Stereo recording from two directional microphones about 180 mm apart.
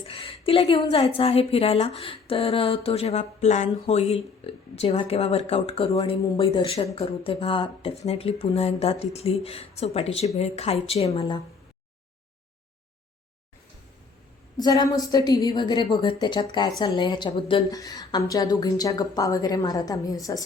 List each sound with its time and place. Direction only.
0.0 s a woman's voice: 30° left (ahead or behind)
2.0 s a sound: 30° left (ahead or behind)
14.5 s a woman's voice: 25° left (ahead or behind)